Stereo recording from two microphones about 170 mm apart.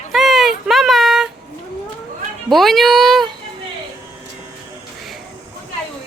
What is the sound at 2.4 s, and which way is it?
Speech, centre (ahead or behind).